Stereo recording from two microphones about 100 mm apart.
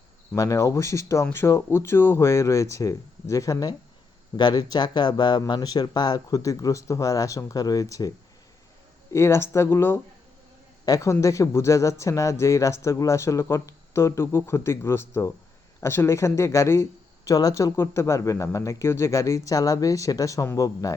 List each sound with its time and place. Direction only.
0.3 s speech: 35° left (ahead or behind)
9.1 s speech: 25° left (ahead or behind)
10.8 s speech: 35° left (ahead or behind)